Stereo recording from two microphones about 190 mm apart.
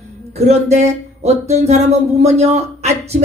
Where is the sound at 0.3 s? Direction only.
35° right (ahead or behind).